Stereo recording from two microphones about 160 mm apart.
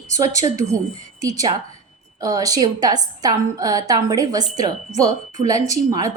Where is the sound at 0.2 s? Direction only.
20° right (ahead or behind).